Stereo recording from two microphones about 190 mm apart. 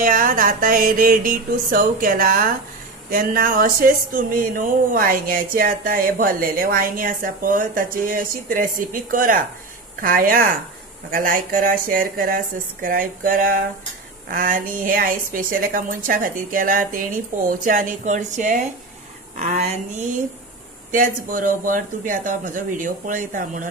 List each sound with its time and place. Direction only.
0.0 s a woman's voice: 45° right (ahead or behind)
20.9 s speech: 45° right (ahead or behind)